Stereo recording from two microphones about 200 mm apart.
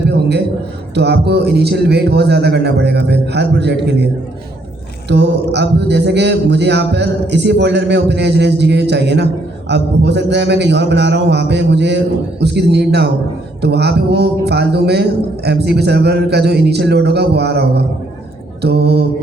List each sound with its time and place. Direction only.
0.9 s speech: 55° right (ahead or behind)
5.0 s speech: 60° right (ahead or behind)